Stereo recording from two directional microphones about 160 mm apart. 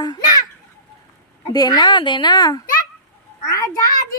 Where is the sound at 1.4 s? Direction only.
25° left (ahead or behind).